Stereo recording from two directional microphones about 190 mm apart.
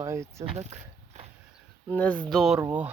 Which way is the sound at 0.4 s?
35° right (ahead or behind).